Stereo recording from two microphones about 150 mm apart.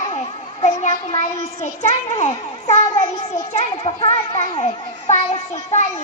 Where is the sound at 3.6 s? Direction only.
40° left (ahead or behind).